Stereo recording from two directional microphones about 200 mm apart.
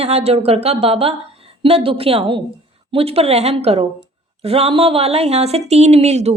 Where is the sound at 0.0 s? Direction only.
30° right (ahead or behind).